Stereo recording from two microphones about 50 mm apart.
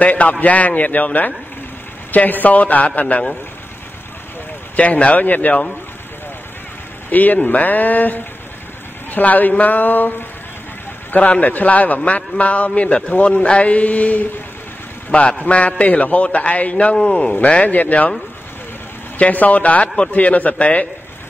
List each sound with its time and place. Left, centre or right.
0.0 s a man's voice: left
4.7 s a man's voice: left
7.1 s a man's voice: left
16.9 s speech: centre
17.6 s a man's voice: left
19.1 s a man's voice: left